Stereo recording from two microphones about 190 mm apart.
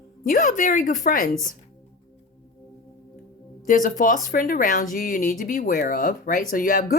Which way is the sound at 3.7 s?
45° left (ahead or behind).